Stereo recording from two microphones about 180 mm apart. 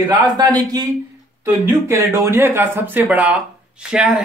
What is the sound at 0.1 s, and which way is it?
Speech, 20° right (ahead or behind).